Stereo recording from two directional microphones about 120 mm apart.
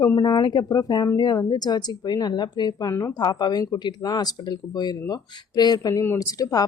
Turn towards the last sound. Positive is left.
turn(degrees=30)  # may be behind; listen again after turning